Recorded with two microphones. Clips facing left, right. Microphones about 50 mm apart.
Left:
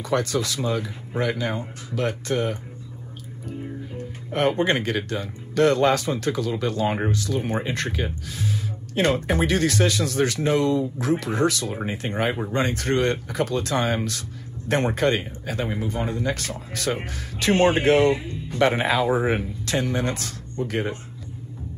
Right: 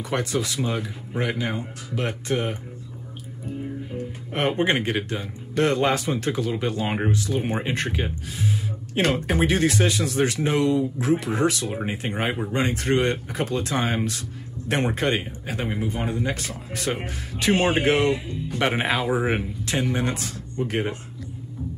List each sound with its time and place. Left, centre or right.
0.0 s speech: right
4.3 s speech: right